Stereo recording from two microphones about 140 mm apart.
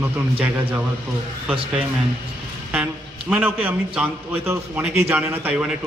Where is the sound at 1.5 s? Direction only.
40° right (ahead or behind).